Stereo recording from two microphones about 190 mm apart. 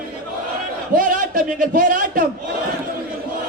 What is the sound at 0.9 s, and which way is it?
Speech, 45° right (ahead or behind).